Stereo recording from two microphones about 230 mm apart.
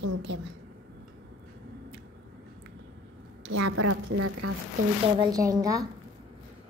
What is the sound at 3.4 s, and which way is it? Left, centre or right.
A woman's voice, right.